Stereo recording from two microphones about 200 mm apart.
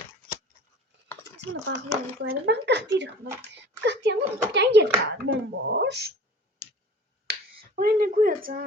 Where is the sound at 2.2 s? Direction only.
60° right (ahead or behind).